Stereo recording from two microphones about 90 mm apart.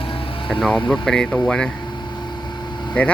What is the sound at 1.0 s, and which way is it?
Speech, 10° left (ahead or behind).